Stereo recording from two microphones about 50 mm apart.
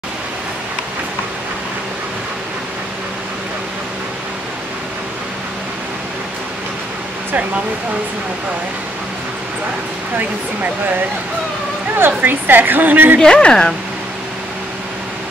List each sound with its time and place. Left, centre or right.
12.2 s a woman's voice: right
13.2 s speech: centre